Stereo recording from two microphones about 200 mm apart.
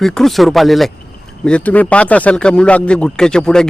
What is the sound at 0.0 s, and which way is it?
Speech, centre (ahead or behind).